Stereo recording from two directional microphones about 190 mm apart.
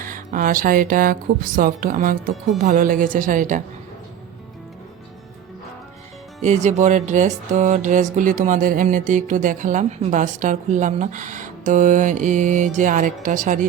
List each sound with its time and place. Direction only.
0.0 s a woman's voice: 45° right (ahead or behind)
6.4 s a woman's voice: 40° right (ahead or behind)